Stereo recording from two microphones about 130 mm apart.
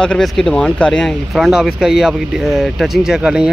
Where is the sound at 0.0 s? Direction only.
5° left (ahead or behind).